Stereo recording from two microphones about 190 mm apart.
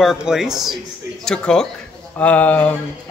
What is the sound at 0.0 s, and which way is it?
A man's voice, centre (ahead or behind).